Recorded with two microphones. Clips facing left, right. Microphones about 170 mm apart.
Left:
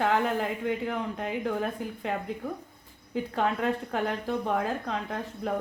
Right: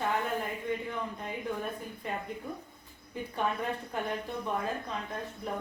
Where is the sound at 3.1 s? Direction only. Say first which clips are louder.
Left 5 dB; 90° left.